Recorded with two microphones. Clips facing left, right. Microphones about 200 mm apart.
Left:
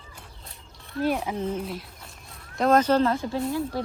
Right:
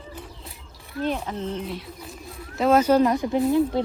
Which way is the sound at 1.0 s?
10° left (ahead or behind).